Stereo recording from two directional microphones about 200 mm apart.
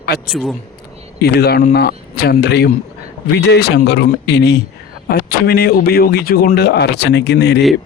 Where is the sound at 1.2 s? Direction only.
50° left (ahead or behind).